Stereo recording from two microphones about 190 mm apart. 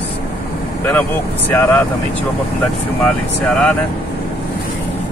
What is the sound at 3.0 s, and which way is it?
Speech, 5° left (ahead or behind).